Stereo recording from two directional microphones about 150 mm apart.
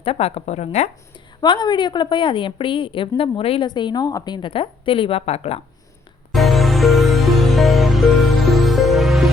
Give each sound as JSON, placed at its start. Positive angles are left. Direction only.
{"t": 0.0, "sound": "a woman's voice", "side_deg": 40}
{"t": 1.4, "sound": "a woman's voice", "side_deg": 30}
{"t": 6.3, "sound": "music", "side_deg": 0}